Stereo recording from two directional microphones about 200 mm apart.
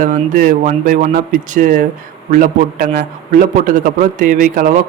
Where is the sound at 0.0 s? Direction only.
40° right (ahead or behind).